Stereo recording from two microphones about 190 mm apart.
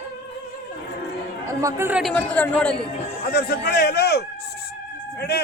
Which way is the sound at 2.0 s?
5° left (ahead or behind).